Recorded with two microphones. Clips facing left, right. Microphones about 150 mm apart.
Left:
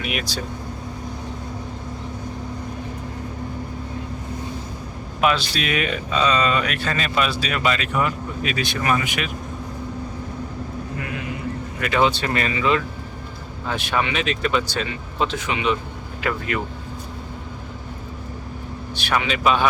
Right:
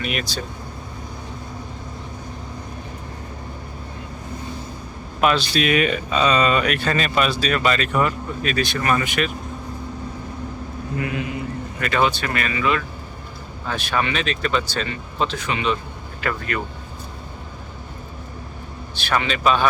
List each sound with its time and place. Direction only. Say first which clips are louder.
0.0 s speech: right 1 dB; 5° left (ahead or behind)
5.2 s a man's voice: right 2 dB; centre (ahead or behind)
5.8 s speech: right 2 dB; 55° right (ahead or behind)
6.8 s a man's voice: right 2 dB; centre (ahead or behind)
8.4 s speech: right 1 dB; 15° left (ahead or behind)
11.8 s speech: left 1 dB; 10° left (ahead or behind)
12.1 s speech: left 2 dB; 30° left (ahead or behind)
19.0 s speech: even; 10° left (ahead or behind)